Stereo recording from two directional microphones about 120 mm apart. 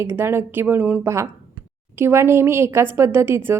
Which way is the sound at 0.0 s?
20° right (ahead or behind).